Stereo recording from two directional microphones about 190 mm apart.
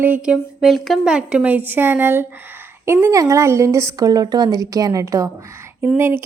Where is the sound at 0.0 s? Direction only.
5° right (ahead or behind).